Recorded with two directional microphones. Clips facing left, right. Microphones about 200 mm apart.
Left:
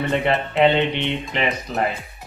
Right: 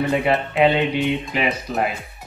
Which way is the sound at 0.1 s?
Centre (ahead or behind).